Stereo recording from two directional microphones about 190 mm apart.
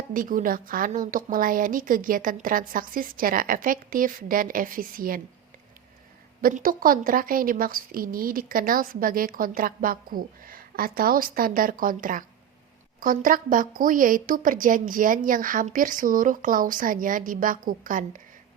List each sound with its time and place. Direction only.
0.1 s a woman's voice: 45° right (ahead or behind)
6.4 s a woman's voice: 45° right (ahead or behind)